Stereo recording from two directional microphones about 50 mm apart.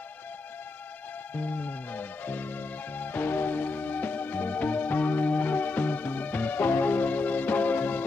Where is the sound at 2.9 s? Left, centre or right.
Left.